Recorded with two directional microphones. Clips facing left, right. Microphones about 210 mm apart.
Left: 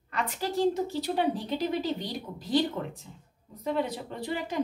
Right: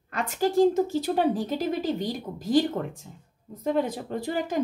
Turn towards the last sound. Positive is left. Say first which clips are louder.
# right 5 dB
turn(degrees=-45)  # may be behind; listen again after turning